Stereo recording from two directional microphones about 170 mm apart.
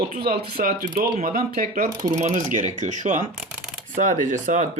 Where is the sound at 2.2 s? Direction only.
45° right (ahead or behind).